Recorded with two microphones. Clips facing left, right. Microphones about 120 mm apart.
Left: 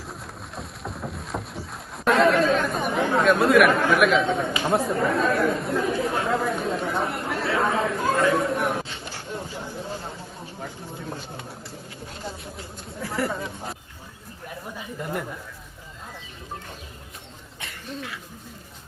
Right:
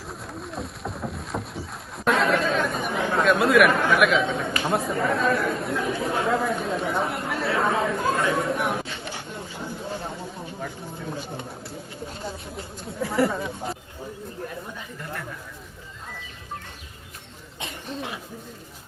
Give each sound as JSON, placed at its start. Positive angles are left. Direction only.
{"t": 0.5, "sound": "rowboat", "side_deg": 0}
{"t": 13.0, "sound": "speech", "side_deg": 0}
{"t": 17.6, "sound": "a sound", "side_deg": -20}